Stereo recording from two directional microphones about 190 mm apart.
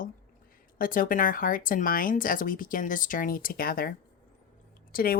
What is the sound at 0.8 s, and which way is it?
Speech, 45° left (ahead or behind).